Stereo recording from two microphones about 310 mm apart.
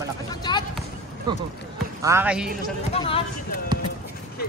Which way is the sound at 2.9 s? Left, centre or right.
Centre.